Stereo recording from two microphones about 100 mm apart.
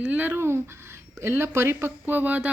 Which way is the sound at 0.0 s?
20° right (ahead or behind).